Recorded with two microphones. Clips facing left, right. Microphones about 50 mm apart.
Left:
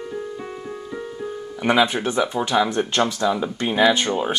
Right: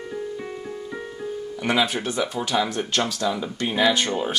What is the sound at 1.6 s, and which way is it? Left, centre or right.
Speech, centre.